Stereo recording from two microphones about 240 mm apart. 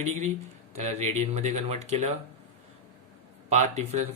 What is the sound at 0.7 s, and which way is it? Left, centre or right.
Speech, right.